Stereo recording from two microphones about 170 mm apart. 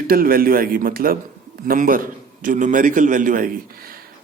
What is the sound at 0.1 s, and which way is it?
A man's voice, 60° right (ahead or behind).